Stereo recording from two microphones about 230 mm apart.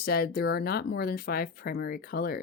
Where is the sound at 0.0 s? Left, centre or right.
Left.